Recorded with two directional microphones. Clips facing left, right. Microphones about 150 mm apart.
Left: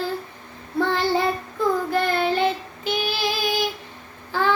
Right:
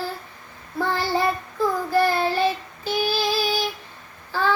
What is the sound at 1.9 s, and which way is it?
Child singing, 20° left (ahead or behind).